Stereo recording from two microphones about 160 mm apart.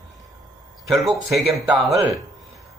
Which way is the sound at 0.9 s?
Centre (ahead or behind).